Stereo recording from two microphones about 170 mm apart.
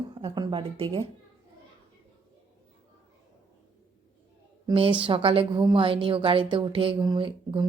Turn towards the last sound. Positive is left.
turn(degrees=-30)  # may be behind; listen again after turning